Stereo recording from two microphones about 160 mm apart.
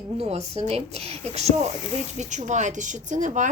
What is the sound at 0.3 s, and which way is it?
Speech, 40° right (ahead or behind).